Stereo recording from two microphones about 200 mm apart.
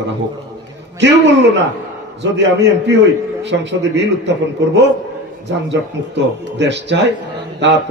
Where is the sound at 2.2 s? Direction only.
60° right (ahead or behind).